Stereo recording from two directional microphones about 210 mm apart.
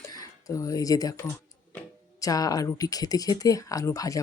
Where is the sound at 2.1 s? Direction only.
15° left (ahead or behind).